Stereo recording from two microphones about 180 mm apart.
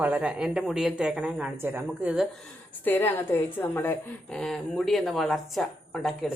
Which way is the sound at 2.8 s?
10° left (ahead or behind).